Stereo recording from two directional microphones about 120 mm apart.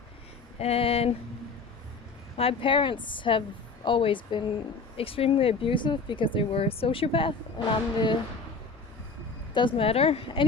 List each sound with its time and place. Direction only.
0.6 s a sound: 55° left (ahead or behind)
2.3 s speech: 55° left (ahead or behind)
9.6 s speech: 45° left (ahead or behind)